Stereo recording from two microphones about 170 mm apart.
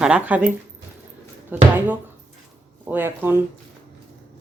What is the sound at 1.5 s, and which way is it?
Speech, 10° right (ahead or behind).